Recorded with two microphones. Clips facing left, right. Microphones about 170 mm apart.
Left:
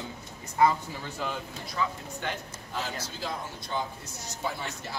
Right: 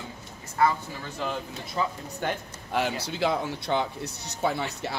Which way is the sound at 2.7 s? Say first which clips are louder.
Right 8 dB; 70° right (ahead or behind).